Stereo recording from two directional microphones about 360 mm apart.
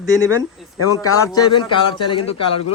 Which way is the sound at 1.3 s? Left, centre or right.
Centre.